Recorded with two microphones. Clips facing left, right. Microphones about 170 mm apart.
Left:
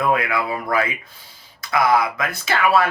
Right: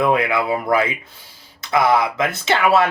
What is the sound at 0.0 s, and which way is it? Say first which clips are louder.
Speech: right 3 dB; 25° right (ahead or behind).